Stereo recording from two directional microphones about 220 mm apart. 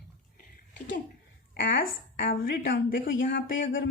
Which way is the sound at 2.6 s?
55° left (ahead or behind).